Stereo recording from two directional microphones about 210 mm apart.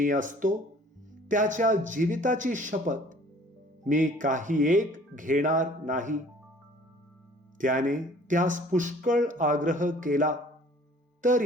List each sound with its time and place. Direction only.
0.0 s speech: 40° right (ahead or behind)
7.6 s speech: 40° right (ahead or behind)